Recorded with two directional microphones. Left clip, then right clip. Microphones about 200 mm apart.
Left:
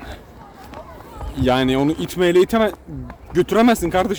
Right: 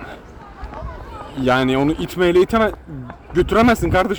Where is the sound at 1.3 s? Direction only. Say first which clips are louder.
Right 1 dB; 10° left (ahead or behind).